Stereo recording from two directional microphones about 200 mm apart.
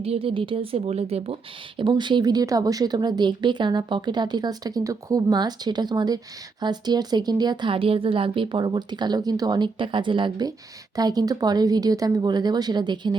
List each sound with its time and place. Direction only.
0.0 s speech: 30° right (ahead or behind)